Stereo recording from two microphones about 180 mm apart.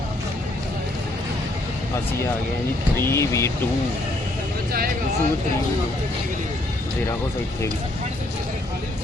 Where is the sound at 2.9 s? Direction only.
15° left (ahead or behind).